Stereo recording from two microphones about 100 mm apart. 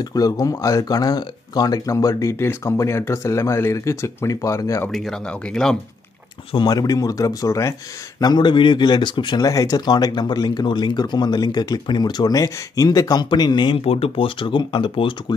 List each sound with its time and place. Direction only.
0.0 s speech: 40° left (ahead or behind)
4.9 s speech: 5° left (ahead or behind)
6.5 s speech: 45° left (ahead or behind)
8.2 s speech: 45° left (ahead or behind)
9.4 s speech: 35° left (ahead or behind)
13.7 s speech: 70° left (ahead or behind); by 15.3 s 55° left (ahead or behind)